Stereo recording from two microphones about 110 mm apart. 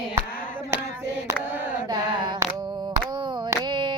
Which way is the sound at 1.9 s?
45° right (ahead or behind).